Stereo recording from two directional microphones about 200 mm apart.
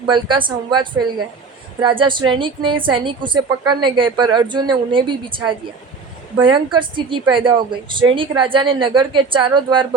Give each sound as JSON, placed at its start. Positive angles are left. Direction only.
{"t": 0.1, "sound": "a woman's voice", "side_deg": -25}